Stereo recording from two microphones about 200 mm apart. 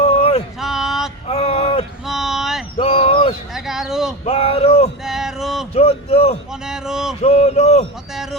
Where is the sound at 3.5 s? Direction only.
Centre (ahead or behind).